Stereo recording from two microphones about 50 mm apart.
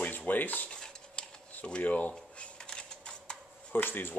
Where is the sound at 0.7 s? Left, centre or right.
Centre.